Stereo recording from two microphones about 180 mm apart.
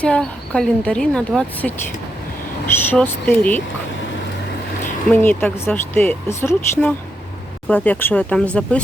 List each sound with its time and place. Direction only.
0.0 s speech: 5° left (ahead or behind)
5.1 s speech: 10° left (ahead or behind)